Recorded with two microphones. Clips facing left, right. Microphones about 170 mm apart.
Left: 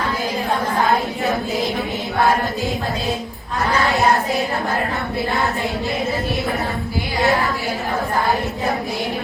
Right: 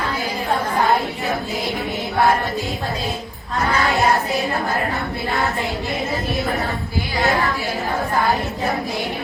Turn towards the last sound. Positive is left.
turn(degrees=20)  # may be behind; listen again after turning